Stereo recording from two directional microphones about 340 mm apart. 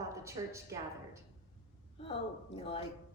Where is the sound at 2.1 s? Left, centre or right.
Centre.